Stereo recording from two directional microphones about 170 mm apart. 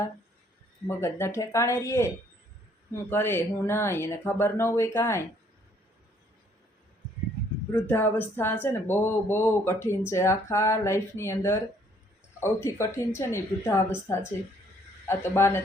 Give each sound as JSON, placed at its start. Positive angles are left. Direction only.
{"t": 0.9, "sound": "speech", "side_deg": 15}
{"t": 3.1, "sound": "speech", "side_deg": 15}
{"t": 7.7, "sound": "speech", "side_deg": 10}